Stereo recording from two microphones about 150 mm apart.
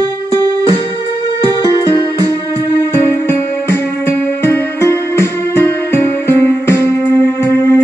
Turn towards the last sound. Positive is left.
turn(degrees=20)  # may be behind; listen again after turning